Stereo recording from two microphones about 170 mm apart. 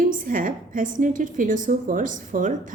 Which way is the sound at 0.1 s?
55° right (ahead or behind).